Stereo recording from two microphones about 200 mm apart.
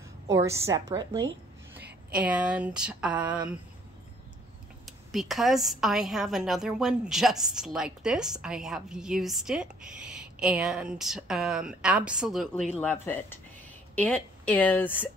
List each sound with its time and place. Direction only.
0.3 s a woman's voice: 15° right (ahead or behind)
1.8 s a sound: 55° right (ahead or behind)
2.1 s a woman's voice: 5° right (ahead or behind)
4.8 s a woman's voice: centre (ahead or behind)
12.7 s speech: 10° left (ahead or behind)